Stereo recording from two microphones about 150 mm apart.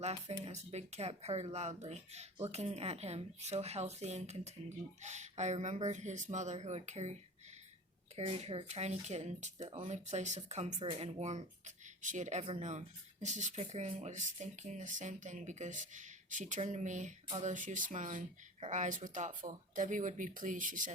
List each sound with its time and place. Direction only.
0.3 s speech: 50° right (ahead or behind)
10.8 s speech: 40° right (ahead or behind); by 20.9 s 60° right (ahead or behind)